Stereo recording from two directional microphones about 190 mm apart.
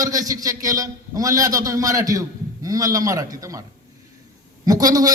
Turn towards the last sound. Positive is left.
turn(degrees=-20)  # may be behind; listen again after turning